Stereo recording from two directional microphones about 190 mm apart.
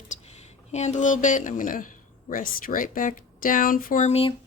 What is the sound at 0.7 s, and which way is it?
Speech, 40° left (ahead or behind).